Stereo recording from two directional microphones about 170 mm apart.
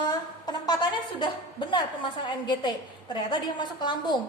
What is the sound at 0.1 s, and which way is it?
A woman's voice, 20° left (ahead or behind).